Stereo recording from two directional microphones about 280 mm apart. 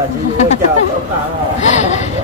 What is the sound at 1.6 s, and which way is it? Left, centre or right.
Speech, left.